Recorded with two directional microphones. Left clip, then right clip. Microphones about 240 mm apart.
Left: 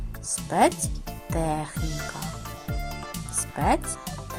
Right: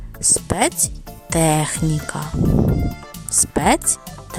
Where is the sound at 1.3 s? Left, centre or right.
Right.